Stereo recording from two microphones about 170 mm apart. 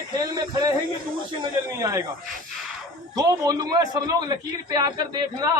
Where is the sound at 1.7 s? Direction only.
15° right (ahead or behind).